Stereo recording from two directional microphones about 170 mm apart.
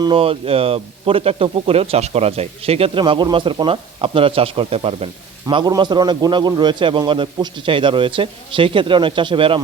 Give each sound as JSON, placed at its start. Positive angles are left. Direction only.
{"t": 0.0, "sound": "a man's voice", "side_deg": -30}